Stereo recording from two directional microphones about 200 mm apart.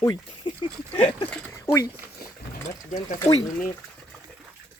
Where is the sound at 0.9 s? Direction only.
25° left (ahead or behind).